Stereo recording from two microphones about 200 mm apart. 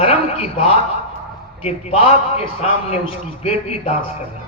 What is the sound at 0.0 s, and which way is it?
A man's voice, 30° left (ahead or behind).